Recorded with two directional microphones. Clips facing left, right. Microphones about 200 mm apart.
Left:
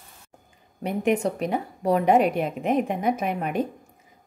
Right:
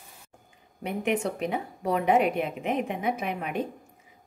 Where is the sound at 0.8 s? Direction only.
40° left (ahead or behind).